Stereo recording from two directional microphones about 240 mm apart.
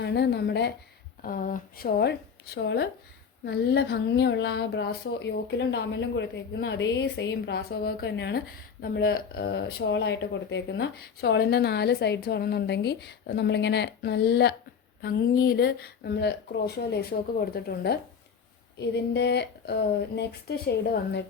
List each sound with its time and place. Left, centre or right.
0.0 s speech: left